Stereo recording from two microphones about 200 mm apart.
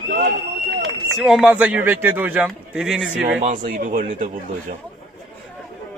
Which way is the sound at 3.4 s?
40° right (ahead or behind).